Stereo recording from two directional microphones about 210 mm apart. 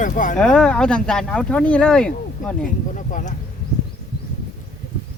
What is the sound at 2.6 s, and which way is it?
Speech, 40° left (ahead or behind).